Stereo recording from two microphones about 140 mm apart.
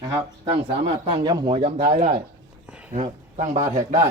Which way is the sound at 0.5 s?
40° right (ahead or behind).